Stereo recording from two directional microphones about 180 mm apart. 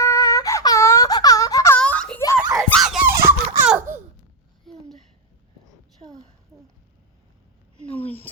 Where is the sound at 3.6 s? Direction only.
10° right (ahead or behind).